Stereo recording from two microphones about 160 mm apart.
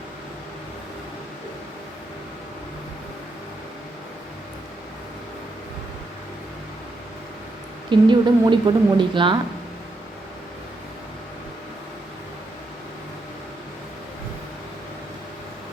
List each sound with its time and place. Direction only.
7.9 s speech: 30° right (ahead or behind)